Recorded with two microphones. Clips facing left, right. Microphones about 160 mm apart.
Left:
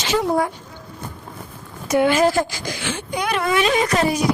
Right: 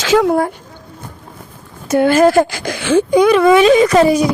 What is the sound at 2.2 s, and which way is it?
Speech, 60° right (ahead or behind).